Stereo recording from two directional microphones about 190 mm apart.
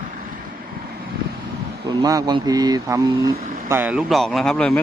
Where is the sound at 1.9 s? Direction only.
20° right (ahead or behind); by 4.8 s 5° left (ahead or behind).